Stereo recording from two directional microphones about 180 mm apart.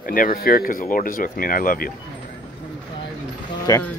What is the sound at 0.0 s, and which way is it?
Speech, 50° left (ahead or behind).